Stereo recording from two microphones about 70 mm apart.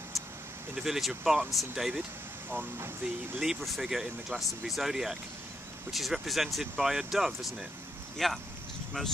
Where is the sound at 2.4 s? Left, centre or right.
Right.